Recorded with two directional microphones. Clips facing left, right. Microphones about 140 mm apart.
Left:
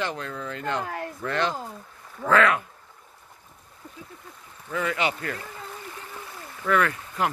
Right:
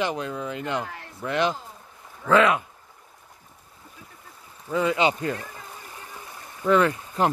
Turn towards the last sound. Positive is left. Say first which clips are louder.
# right 3 dB
turn(degrees=-25)  # may be behind; listen again after turning